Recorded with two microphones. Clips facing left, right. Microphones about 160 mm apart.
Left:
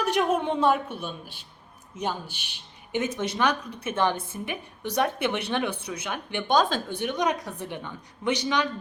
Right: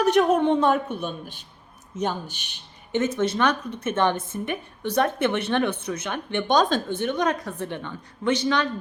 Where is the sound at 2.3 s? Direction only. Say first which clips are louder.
Even; 50° right (ahead or behind).